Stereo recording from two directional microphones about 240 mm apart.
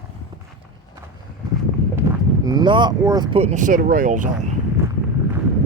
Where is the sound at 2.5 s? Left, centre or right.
Centre; by 4.2 s right.